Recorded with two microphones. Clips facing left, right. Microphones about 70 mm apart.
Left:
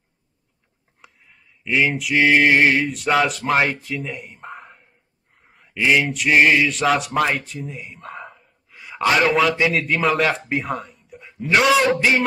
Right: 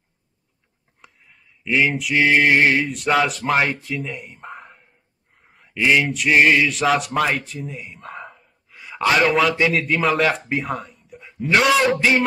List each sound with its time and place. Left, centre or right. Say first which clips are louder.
1.0 s mantra: even; centre
3.8 s speech: even; centre
5.4 s a sound: right 1 dB; centre
6.0 s speech: even; centre